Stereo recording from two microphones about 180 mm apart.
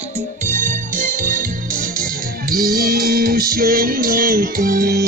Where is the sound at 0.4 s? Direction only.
45° right (ahead or behind).